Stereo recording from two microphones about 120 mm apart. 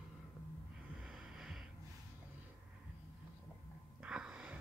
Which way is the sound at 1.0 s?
5° right (ahead or behind).